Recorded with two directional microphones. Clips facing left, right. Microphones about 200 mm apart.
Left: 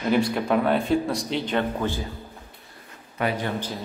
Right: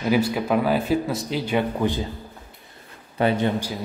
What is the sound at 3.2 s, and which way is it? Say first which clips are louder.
Speech: right 5 dB; 25° right (ahead or behind).